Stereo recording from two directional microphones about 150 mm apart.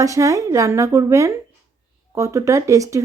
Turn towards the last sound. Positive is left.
turn(degrees=-20)  # may be behind; listen again after turning